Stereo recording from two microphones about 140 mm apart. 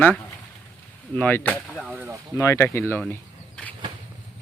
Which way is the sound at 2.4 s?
20° left (ahead or behind).